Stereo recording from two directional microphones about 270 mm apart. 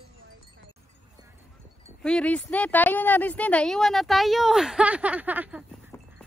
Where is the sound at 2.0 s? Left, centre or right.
Centre.